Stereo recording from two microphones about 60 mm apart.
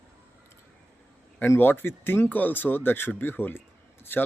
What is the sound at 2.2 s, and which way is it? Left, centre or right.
Speech, left.